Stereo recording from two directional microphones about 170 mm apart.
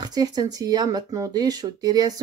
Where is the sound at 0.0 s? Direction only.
25° right (ahead or behind).